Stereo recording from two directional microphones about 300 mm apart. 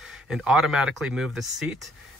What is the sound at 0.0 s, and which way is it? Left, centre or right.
Speech, centre.